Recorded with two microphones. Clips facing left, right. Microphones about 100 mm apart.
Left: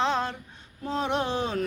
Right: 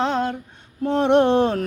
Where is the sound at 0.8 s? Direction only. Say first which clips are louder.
Right 11 dB; 70° right (ahead or behind).